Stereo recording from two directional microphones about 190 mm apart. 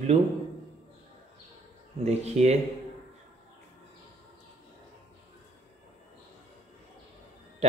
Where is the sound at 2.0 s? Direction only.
35° right (ahead or behind).